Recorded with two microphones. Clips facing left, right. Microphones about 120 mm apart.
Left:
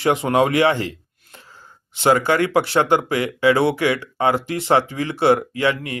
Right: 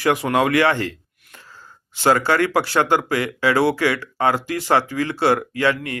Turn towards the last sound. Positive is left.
turn(degrees=20)  # may be behind; listen again after turning